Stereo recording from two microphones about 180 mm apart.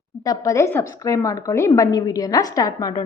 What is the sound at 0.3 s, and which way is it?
A woman's voice, 15° left (ahead or behind).